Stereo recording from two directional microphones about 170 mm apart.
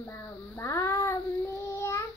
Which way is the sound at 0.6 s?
15° left (ahead or behind).